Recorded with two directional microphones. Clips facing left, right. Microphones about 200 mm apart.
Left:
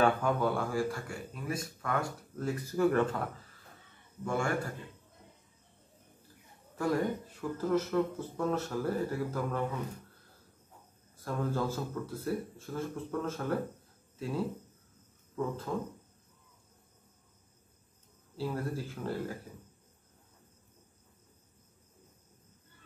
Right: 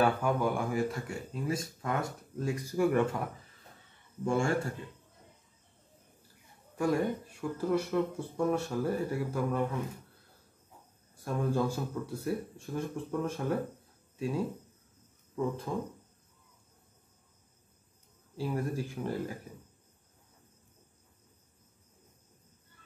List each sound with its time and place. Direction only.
0.0 s speech: 10° right (ahead or behind)
4.2 s a man's voice: 25° right (ahead or behind)
6.8 s speech: 10° right (ahead or behind)
11.1 s speech: 15° right (ahead or behind)
18.3 s speech: 15° right (ahead or behind)